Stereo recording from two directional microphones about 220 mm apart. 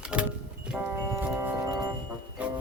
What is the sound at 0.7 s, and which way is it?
Music, 10° right (ahead or behind).